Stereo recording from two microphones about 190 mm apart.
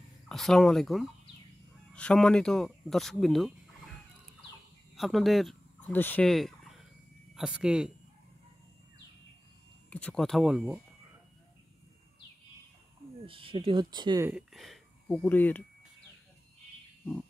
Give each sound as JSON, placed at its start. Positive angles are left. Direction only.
{"t": 0.3, "sound": "speech", "side_deg": 0}
{"t": 4.9, "sound": "turkey", "side_deg": 0}
{"t": 7.3, "sound": "speech", "side_deg": -5}
{"t": 9.8, "sound": "speech", "side_deg": 5}
{"t": 13.2, "sound": "speech", "side_deg": -30}
{"t": 14.2, "sound": "speech", "side_deg": -5}